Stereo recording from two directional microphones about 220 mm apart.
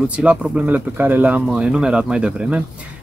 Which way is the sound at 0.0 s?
5° right (ahead or behind).